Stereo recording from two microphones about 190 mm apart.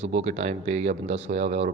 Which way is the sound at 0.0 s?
35° right (ahead or behind).